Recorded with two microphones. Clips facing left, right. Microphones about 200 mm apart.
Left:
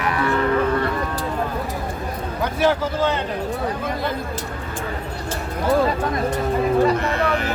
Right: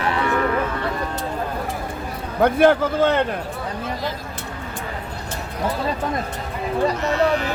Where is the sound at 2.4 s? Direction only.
55° right (ahead or behind).